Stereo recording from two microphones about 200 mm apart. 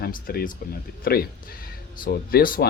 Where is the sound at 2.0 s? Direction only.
45° left (ahead or behind).